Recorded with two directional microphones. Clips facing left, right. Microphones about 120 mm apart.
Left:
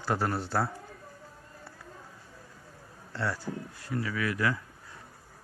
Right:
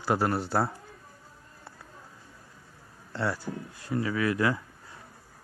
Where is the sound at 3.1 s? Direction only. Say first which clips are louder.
Right 2 dB; 20° right (ahead or behind).